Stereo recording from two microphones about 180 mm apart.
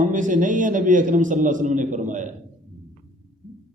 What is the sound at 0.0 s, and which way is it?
A man's voice, 45° right (ahead or behind).